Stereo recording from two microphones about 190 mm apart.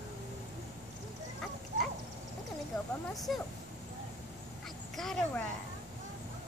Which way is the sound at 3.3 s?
Centre (ahead or behind).